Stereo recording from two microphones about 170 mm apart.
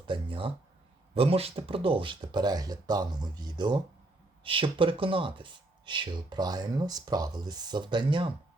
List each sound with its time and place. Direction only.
0.0 s speech: 30° right (ahead or behind)